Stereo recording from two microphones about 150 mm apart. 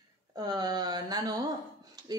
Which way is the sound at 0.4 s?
25° right (ahead or behind).